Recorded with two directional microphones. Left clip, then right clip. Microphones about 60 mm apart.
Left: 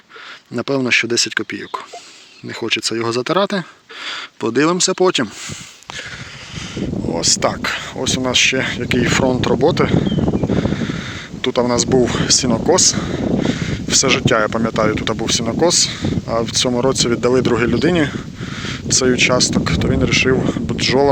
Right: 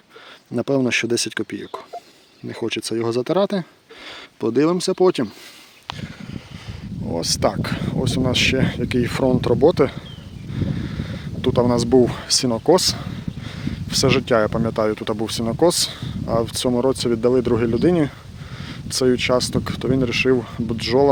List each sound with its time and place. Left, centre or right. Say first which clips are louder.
0.5 s speech: left 4 dB; right; by 5.3 s centre
7.1 s speech: left 3 dB; centre; by 10.0 s right
10.5 s a sound: left 10 dB; right
11.6 s speech: left 3 dB; right
11.9 s speech: left 1 dB; right
15.6 s speech: left 2 dB; right
16.6 s speech: left 3 dB; centre
18.9 s speech: left 4 dB; right
19.9 s speech: left 2 dB; right